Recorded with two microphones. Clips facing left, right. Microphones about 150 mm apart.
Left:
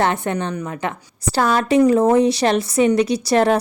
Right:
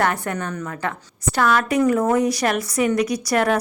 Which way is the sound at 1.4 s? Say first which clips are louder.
Left 3 dB; 30° left (ahead or behind).